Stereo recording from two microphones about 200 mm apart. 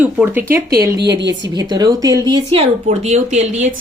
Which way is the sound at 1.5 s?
20° right (ahead or behind).